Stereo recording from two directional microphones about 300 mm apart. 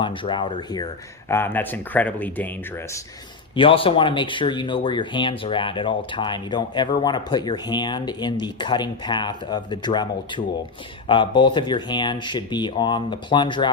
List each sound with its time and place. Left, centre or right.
0.0 s speech: centre
3.5 s speech: centre